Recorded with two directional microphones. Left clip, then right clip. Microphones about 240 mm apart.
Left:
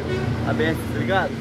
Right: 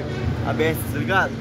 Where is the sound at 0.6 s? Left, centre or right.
Right.